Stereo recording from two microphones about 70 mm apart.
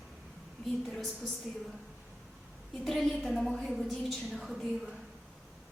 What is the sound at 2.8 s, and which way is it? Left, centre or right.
A woman's voice, centre.